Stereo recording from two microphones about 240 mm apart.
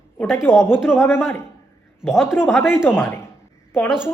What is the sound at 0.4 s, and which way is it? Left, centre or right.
Speech, centre.